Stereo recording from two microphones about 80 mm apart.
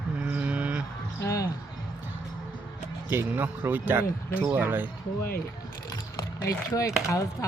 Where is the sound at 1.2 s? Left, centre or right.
Left.